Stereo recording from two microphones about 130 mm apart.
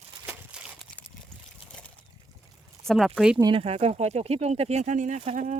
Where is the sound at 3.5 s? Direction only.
50° right (ahead or behind).